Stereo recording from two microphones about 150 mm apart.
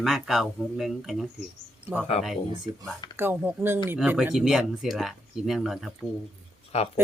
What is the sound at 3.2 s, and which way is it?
Speech, 15° right (ahead or behind).